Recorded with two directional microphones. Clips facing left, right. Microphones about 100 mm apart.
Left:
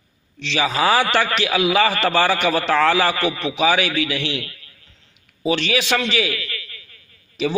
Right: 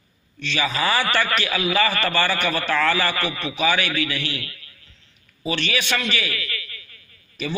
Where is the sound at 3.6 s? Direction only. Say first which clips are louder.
Left 4 dB; 90° left.